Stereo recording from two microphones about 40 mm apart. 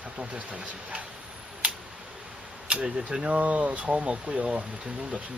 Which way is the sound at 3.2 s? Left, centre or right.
Right.